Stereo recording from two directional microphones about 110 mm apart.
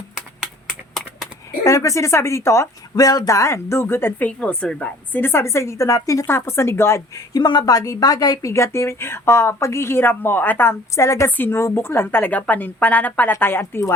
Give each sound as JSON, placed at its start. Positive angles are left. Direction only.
{"t": 0.3, "sound": "a sound", "side_deg": 0}
{"t": 1.6, "sound": "a woman's voice", "side_deg": 30}
{"t": 7.3, "sound": "a woman's voice", "side_deg": 40}